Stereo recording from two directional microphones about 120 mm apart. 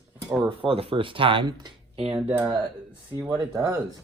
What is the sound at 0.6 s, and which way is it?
Speech, 50° right (ahead or behind).